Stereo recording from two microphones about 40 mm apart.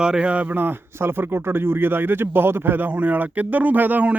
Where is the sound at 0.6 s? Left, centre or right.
Right.